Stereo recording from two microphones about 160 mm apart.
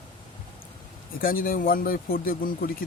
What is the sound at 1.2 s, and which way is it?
Speech, 65° left (ahead or behind).